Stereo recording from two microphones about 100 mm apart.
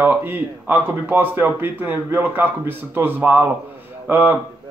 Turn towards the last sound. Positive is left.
turn(degrees=-15)  # may be behind; listen again after turning